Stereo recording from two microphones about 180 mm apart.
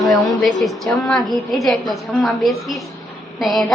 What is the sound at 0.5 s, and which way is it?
A woman's voice, centre (ahead or behind).